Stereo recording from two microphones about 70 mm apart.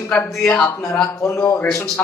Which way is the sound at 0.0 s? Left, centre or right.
Left.